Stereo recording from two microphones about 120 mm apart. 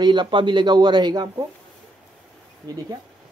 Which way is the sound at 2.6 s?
35° right (ahead or behind).